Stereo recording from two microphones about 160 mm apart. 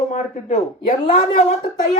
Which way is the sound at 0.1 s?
45° left (ahead or behind).